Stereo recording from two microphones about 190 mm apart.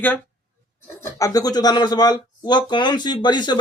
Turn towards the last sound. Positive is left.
turn(degrees=25)  # may be behind; listen again after turning